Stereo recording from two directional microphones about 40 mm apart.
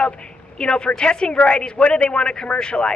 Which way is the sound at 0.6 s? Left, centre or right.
Left.